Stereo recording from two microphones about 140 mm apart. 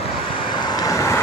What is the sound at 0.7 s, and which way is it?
Vehicle, 25° left (ahead or behind).